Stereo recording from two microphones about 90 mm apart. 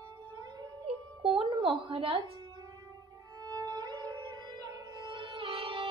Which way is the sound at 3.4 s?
50° right (ahead or behind).